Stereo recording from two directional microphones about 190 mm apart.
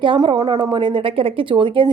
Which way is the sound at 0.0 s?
25° right (ahead or behind).